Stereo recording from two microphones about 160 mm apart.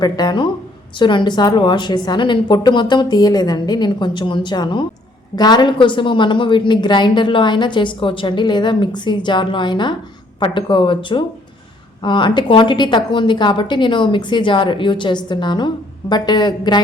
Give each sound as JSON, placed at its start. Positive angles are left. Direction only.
{"t": 0.0, "sound": "a woman's voice", "side_deg": 25}